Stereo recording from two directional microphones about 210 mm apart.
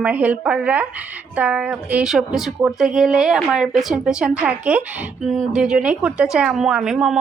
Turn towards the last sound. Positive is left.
turn(degrees=0)  # may be behind; listen again after turning